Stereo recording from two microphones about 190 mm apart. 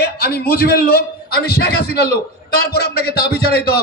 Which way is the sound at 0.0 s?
55° left (ahead or behind).